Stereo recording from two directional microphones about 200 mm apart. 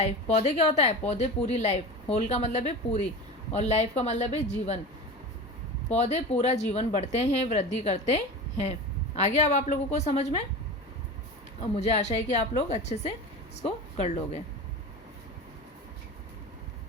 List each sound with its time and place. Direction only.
0.0 s a woman's voice: 35° left (ahead or behind)
5.9 s a woman's voice: 35° left (ahead or behind)
11.6 s a woman's voice: 35° left (ahead or behind)